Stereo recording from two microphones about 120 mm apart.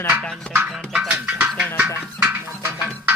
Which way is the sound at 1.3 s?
10° right (ahead or behind).